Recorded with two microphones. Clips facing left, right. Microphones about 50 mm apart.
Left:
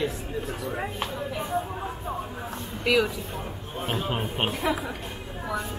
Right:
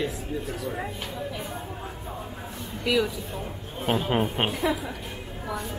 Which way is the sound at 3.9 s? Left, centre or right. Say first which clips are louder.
Right 5 dB; centre.